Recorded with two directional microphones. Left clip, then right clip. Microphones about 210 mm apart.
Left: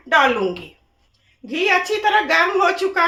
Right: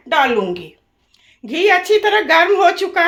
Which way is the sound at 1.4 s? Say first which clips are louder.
Right 4 dB; 55° right (ahead or behind).